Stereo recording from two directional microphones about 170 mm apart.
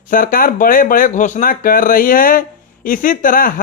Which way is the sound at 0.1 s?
55° left (ahead or behind).